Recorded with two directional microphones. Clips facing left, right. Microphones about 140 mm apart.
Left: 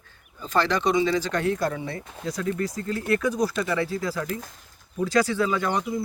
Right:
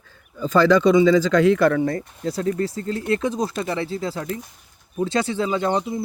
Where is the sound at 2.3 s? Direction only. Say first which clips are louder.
Right 4 dB; 30° right (ahead or behind).